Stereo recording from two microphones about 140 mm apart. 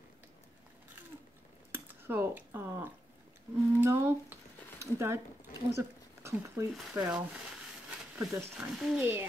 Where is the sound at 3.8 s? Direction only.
15° right (ahead or behind).